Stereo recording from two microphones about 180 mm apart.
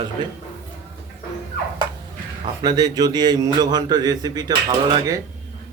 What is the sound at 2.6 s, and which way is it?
A man's voice, 20° right (ahead or behind).